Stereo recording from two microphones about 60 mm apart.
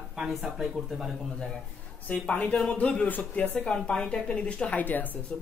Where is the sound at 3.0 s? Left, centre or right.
Left.